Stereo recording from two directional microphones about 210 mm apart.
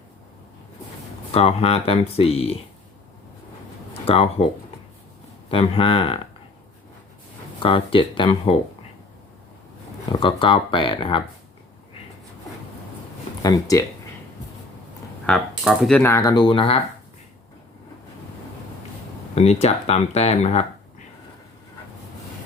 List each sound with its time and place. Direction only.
1.3 s speech: 30° left (ahead or behind)
4.0 s speech: 25° left (ahead or behind)
5.5 s speech: 25° left (ahead or behind)
7.6 s speech: 25° left (ahead or behind)
10.1 s speech: 25° left (ahead or behind)
13.4 s speech: 15° left (ahead or behind)
15.3 s speech: centre (ahead or behind); by 16.8 s 25° left (ahead or behind)
19.4 s speech: 30° left (ahead or behind)